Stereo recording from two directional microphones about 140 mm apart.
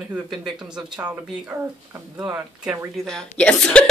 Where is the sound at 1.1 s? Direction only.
20° right (ahead or behind).